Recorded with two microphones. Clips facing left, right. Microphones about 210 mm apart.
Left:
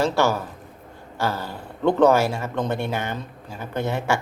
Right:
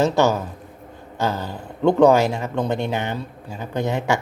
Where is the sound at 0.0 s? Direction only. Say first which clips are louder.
Right 3 dB; 20° right (ahead or behind).